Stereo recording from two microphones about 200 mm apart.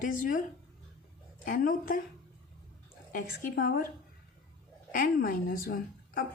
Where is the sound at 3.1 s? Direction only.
45° left (ahead or behind).